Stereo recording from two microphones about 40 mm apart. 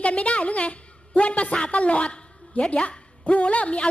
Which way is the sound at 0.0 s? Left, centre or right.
Left.